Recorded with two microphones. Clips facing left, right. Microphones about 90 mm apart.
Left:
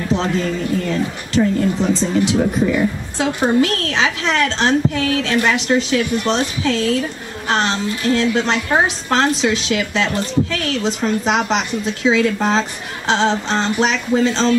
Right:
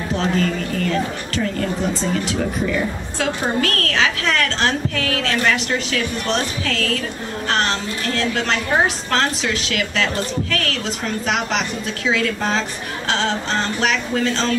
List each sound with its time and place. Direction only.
0.1 s a woman's voice: 20° left (ahead or behind)